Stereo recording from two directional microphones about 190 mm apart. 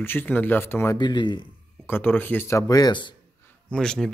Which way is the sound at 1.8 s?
10° left (ahead or behind).